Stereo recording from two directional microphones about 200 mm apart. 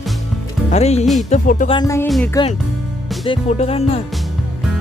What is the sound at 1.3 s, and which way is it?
Speech, 40° left (ahead or behind).